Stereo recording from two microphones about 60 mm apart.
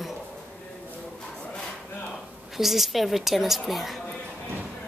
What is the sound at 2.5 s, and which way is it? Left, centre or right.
A woman's voice, centre.